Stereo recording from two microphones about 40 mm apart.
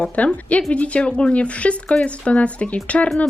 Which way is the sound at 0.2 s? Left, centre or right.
Left.